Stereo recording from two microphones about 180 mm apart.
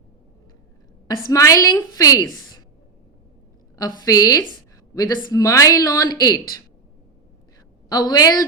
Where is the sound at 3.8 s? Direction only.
20° left (ahead or behind).